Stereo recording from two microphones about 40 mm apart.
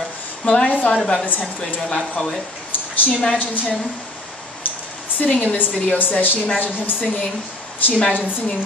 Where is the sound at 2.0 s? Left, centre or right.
Centre.